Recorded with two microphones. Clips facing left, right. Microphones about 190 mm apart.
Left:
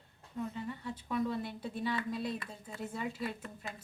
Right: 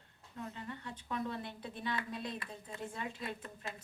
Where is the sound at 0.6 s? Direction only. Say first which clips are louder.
Left 4 dB; 10° left (ahead or behind).